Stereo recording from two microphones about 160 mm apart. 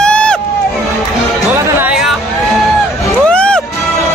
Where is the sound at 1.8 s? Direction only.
5° right (ahead or behind).